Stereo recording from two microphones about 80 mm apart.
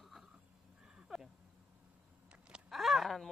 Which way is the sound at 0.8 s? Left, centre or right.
Centre.